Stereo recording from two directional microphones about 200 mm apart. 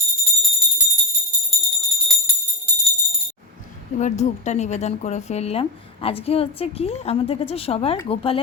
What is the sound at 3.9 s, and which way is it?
A woman's voice, 35° left (ahead or behind).